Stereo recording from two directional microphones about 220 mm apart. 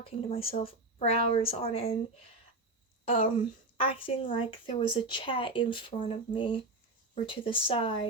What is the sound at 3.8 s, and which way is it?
A child's voice, 25° left (ahead or behind).